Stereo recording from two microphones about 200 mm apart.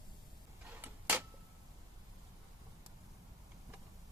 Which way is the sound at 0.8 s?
10° right (ahead or behind).